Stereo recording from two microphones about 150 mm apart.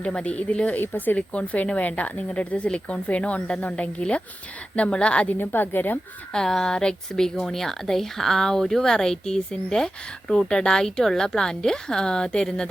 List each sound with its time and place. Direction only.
0.0 s a woman's voice: 10° left (ahead or behind)